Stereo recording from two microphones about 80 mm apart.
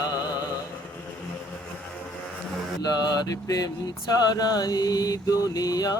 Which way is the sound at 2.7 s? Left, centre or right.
Left.